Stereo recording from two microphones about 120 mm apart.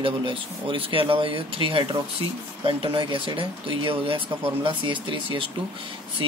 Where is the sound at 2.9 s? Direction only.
45° right (ahead or behind).